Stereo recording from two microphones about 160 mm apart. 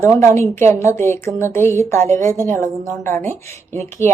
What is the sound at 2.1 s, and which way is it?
Speech, 50° right (ahead or behind).